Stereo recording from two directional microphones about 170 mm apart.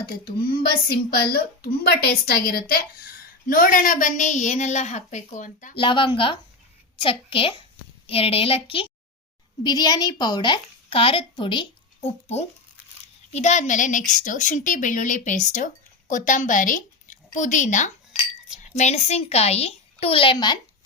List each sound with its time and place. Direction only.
0.0 s speech: 60° left (ahead or behind)
5.7 s a woman's voice: 30° left (ahead or behind)